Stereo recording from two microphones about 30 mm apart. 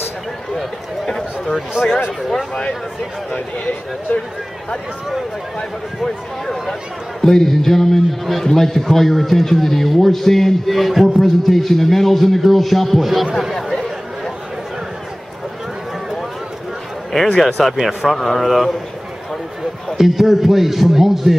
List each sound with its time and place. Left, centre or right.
1.0 s a sound: centre
3.3 s speech: left
6.7 s a man's voice: centre
13.6 s chatter: centre
17.4 s a man's voice: centre
20.0 s a man's voice: centre